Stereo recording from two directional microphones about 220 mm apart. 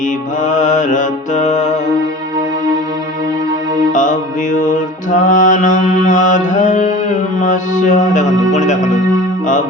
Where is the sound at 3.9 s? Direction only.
35° left (ahead or behind).